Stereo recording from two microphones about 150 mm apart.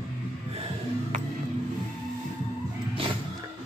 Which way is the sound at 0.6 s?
40° right (ahead or behind).